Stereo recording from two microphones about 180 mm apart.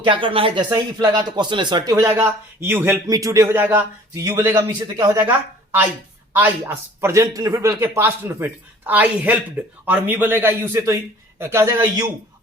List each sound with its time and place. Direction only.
0.0 s speech: 30° right (ahead or behind)
6.3 s a man's voice: 10° right (ahead or behind)